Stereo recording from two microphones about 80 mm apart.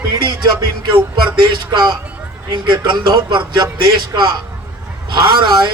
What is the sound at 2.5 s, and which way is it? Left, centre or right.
Speech, right.